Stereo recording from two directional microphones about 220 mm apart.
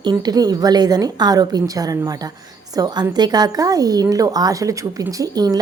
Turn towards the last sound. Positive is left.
turn(degrees=-15)  # may be behind; listen again after turning